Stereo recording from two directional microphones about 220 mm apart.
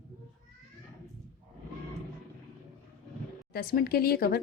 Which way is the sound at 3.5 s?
45° left (ahead or behind).